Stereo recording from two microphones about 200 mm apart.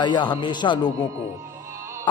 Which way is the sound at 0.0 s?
25° left (ahead or behind).